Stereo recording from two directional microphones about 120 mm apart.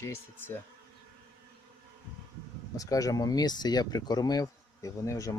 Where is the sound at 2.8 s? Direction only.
30° left (ahead or behind).